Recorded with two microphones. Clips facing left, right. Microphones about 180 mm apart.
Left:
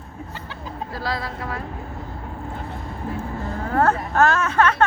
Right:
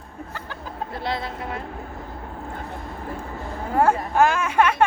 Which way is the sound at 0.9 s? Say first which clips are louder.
Even; 25° right (ahead or behind).